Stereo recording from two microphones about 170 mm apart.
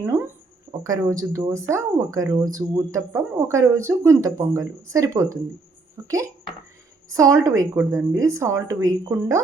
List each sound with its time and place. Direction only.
0.0 s a woman's voice: 10° right (ahead or behind)